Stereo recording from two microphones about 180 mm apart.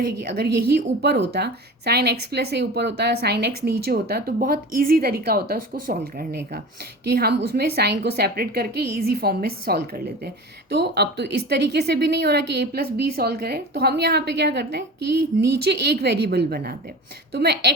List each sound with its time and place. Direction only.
0.0 s a woman's voice: 60° right (ahead or behind)
10.7 s a woman's voice: 65° right (ahead or behind)